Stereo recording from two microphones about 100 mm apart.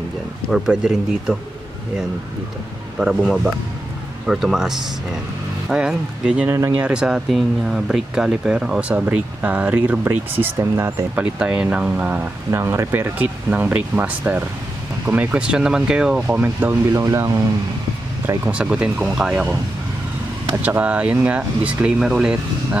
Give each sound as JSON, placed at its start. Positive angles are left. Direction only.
{"t": 0.5, "sound": "speech", "side_deg": -5}
{"t": 3.0, "sound": "speech", "side_deg": -5}
{"t": 11.1, "sound": "speech", "side_deg": -10}
{"t": 16.9, "sound": "speech", "side_deg": -30}
{"t": 18.4, "sound": "speech", "side_deg": -10}
{"t": 20.6, "sound": "speech", "side_deg": -15}